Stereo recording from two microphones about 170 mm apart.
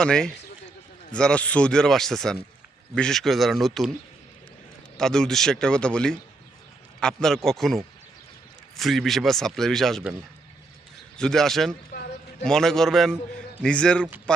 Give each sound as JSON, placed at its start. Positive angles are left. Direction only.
{"t": 0.0, "sound": "speech", "side_deg": 5}
{"t": 4.9, "sound": "speech", "side_deg": 5}
{"t": 11.2, "sound": "speech", "side_deg": 5}